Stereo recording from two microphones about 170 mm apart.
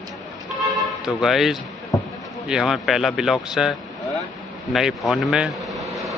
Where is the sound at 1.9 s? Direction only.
20° left (ahead or behind).